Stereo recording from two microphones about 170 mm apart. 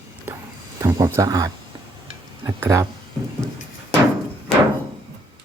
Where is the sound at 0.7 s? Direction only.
20° right (ahead or behind).